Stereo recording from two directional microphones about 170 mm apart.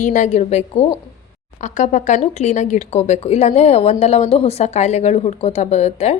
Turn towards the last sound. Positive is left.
turn(degrees=40)  # may be behind; listen again after turning